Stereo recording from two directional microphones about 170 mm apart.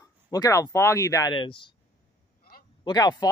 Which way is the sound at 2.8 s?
25° left (ahead or behind).